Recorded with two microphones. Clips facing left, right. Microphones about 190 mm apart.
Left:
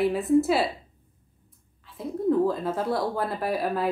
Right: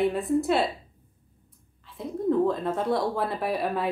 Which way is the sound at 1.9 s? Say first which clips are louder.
Left 1 dB; centre (ahead or behind).